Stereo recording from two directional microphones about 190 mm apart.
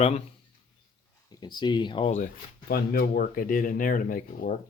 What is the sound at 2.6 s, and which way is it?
Speech, 55° left (ahead or behind).